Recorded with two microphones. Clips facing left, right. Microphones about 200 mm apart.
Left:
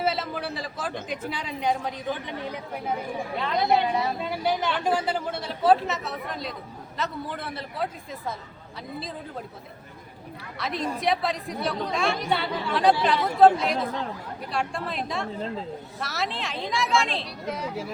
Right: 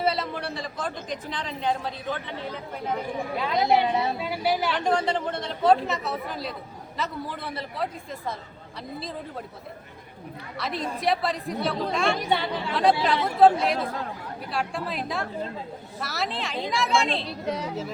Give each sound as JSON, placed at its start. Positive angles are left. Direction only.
{"t": 0.0, "sound": "a sound", "side_deg": 0}
{"t": 1.0, "sound": "speech", "side_deg": 10}
{"t": 3.4, "sound": "a woman's voice", "side_deg": -20}
{"t": 4.2, "sound": "speech", "side_deg": -5}
{"t": 4.7, "sound": "a woman's voice", "side_deg": 5}
{"t": 10.6, "sound": "a woman's voice", "side_deg": 0}
{"t": 17.2, "sound": "a woman's voice", "side_deg": -30}